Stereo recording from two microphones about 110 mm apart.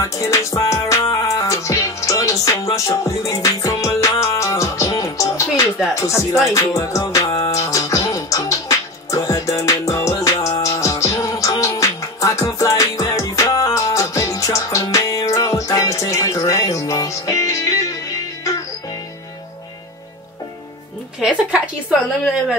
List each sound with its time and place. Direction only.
0.0 s music: 30° left (ahead or behind)
5.9 s speech: 25° left (ahead or behind)
6.5 s music: 30° left (ahead or behind)
21.2 s a woman's voice: 10° right (ahead or behind)